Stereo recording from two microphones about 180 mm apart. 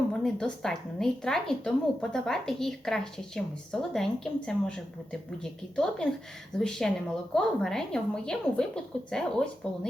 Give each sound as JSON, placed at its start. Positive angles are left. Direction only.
{"t": 0.1, "sound": "a woman's voice", "side_deg": 5}